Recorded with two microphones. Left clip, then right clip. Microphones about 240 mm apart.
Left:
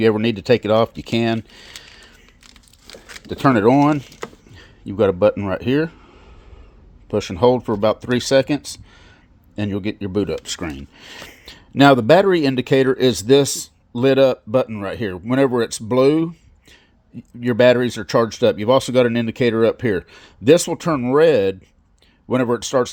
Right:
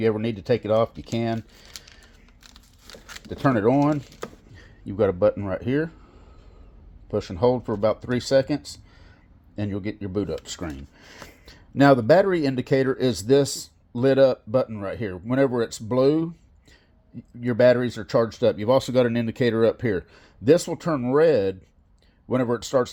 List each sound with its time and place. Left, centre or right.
0.0 s speech: left
3.2 s speech: left
4.2 s a sound: left
7.1 s speech: left